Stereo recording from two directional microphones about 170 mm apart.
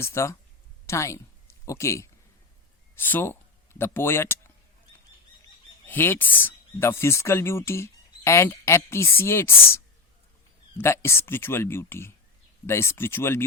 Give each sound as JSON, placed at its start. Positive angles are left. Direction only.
{"t": 0.0, "sound": "speech", "side_deg": 15}
{"t": 5.8, "sound": "speech", "side_deg": 10}